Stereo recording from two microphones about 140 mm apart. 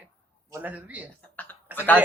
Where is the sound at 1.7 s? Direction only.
10° left (ahead or behind).